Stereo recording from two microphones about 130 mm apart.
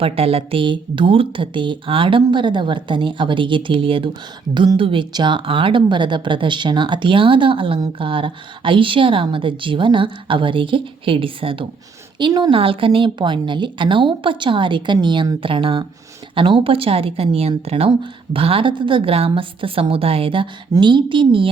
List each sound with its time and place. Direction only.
0.0 s a woman's voice: 50° right (ahead or behind)